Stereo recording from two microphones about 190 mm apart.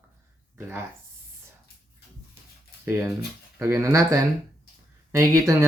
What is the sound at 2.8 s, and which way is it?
Speech, 15° right (ahead or behind).